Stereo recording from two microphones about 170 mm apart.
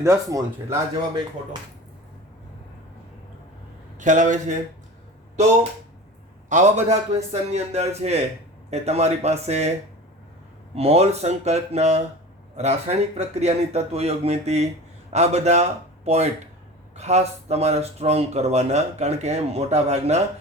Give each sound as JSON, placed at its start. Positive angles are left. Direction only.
{"t": 0.0, "sound": "speech", "side_deg": -20}
{"t": 3.9, "sound": "a man's voice", "side_deg": -45}
{"t": 6.5, "sound": "speech", "side_deg": -45}
{"t": 10.8, "sound": "a man's voice", "side_deg": -35}